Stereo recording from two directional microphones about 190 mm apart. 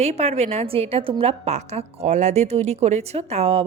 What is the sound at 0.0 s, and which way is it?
A woman's voice, 35° right (ahead or behind).